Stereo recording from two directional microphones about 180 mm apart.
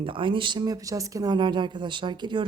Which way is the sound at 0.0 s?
30° right (ahead or behind).